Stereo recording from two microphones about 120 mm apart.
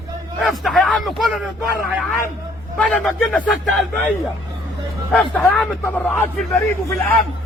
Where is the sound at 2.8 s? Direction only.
10° left (ahead or behind).